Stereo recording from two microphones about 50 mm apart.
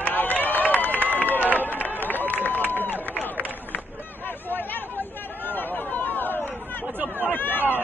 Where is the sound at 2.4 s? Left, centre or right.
Left.